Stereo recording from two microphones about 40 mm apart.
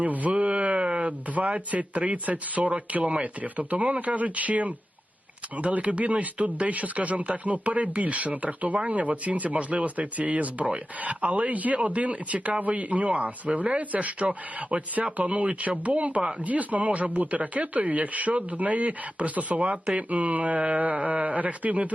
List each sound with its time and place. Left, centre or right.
0.0 s speech: right
0.3 s a sound: right
2.9 s speech: right